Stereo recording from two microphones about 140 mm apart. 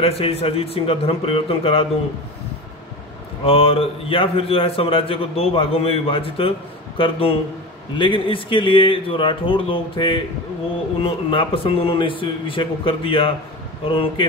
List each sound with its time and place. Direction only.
0.0 s speech: 45° left (ahead or behind)
3.4 s a man's voice: 45° left (ahead or behind)